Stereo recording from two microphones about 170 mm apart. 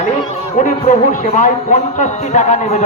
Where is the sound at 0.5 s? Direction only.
45° left (ahead or behind).